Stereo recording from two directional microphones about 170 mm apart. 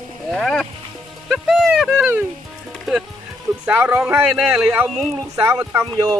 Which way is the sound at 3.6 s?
10° right (ahead or behind).